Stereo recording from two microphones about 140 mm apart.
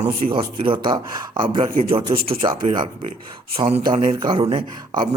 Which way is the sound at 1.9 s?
40° right (ahead or behind).